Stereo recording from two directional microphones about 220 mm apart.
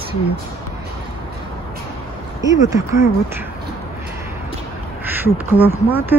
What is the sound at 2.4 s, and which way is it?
Speech, 15° right (ahead or behind).